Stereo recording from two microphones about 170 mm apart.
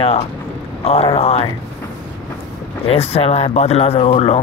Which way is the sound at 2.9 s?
35° left (ahead or behind).